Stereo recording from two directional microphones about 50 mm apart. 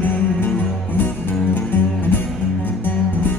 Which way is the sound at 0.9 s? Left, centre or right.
Left.